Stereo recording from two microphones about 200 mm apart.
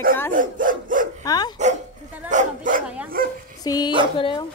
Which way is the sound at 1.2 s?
20° left (ahead or behind).